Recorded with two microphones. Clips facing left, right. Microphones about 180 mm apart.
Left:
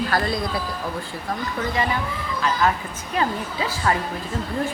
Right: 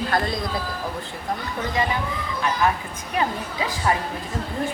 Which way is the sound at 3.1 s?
15° right (ahead or behind).